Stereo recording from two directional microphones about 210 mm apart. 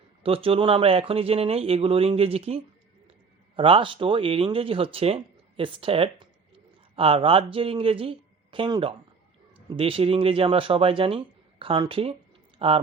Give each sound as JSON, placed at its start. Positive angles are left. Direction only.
{"t": 0.2, "sound": "speech", "side_deg": -25}